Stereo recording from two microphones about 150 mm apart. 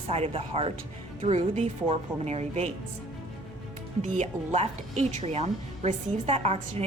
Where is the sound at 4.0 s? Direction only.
50° right (ahead or behind).